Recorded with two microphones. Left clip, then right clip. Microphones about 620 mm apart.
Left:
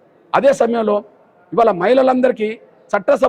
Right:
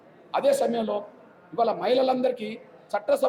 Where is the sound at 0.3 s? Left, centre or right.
Left.